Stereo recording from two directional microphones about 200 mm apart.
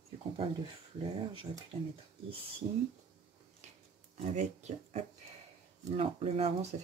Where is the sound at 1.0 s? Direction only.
20° right (ahead or behind).